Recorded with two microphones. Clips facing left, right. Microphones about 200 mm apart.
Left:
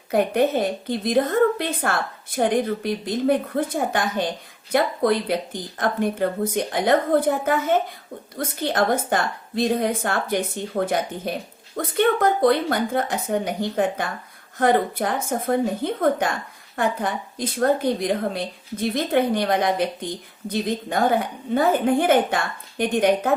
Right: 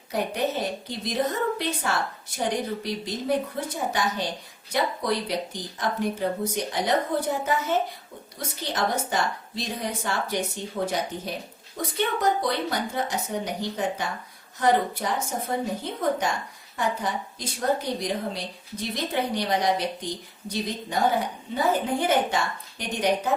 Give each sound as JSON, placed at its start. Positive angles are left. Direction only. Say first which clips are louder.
{"t": 0.1, "sound": "a woman's voice", "louder": "left 7 dB", "side_deg": 55}